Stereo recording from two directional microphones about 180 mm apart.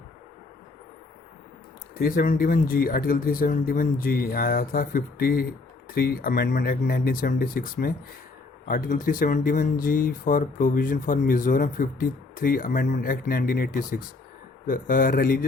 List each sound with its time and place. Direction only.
2.0 s speech: 55° left (ahead or behind)